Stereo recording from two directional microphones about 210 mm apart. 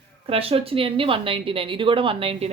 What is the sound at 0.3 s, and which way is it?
A woman's voice, 25° right (ahead or behind).